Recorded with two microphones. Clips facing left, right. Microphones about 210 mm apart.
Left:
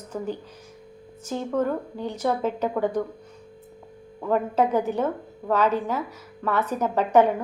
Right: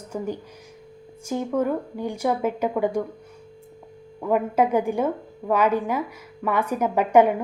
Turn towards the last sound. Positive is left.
turn(degrees=-10)  # may be behind; listen again after turning